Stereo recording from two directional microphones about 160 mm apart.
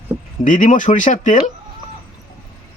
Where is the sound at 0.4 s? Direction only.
55° left (ahead or behind).